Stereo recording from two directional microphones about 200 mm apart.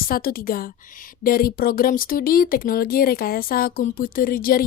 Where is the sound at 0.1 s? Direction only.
45° left (ahead or behind).